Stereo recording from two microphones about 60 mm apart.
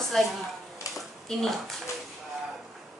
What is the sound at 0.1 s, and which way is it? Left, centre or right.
A woman's voice, centre.